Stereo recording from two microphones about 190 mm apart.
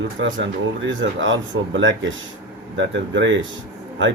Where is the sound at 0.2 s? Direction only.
80° right.